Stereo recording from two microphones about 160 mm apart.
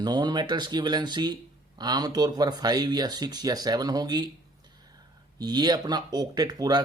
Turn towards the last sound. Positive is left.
turn(degrees=-25)  # may be behind; listen again after turning